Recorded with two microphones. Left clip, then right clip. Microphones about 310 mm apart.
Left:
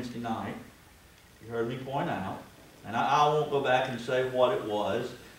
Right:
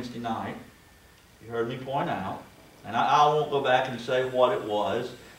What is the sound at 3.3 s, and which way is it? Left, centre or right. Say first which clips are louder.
Speech: right 3 dB; right.